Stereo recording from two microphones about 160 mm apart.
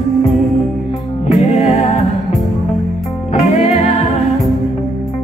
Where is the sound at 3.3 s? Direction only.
45° left (ahead or behind).